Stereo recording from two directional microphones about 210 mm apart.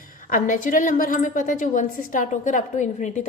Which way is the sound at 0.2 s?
40° left (ahead or behind).